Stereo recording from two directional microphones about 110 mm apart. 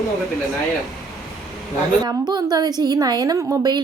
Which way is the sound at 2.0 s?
40° right (ahead or behind).